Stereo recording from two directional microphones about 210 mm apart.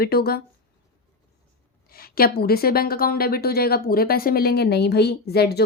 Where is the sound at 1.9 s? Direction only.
45° left (ahead or behind).